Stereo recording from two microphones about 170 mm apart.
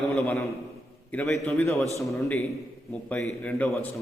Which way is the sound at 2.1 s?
15° left (ahead or behind).